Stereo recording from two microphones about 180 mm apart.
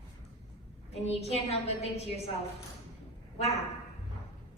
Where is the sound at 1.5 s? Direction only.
35° left (ahead or behind).